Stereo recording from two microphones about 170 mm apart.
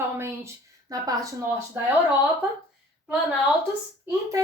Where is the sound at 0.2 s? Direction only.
15° right (ahead or behind).